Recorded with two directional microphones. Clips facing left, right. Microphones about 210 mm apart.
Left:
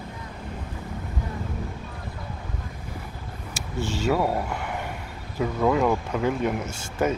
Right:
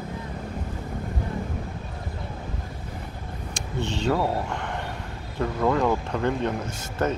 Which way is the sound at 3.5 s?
5° left (ahead or behind).